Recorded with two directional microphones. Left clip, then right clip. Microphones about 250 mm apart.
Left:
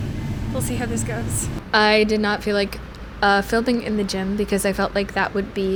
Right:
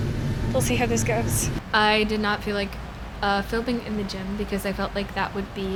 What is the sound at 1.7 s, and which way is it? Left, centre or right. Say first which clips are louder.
A woman's voice: left 4 dB; left.